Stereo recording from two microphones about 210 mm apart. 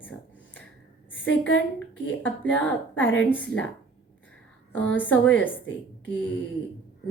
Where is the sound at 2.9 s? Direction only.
65° left (ahead or behind).